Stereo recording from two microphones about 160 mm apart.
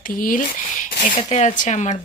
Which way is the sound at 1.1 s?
45° left (ahead or behind).